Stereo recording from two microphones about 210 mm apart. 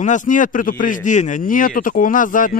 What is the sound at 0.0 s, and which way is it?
A man's voice, 35° left (ahead or behind).